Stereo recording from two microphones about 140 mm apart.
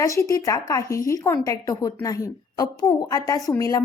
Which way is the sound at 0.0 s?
20° left (ahead or behind).